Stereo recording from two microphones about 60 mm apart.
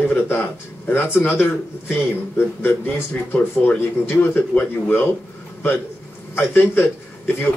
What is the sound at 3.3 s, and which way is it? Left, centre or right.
Speech, left.